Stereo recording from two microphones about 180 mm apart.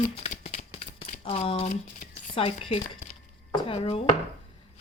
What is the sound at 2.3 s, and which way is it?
Speech, 30° left (ahead or behind).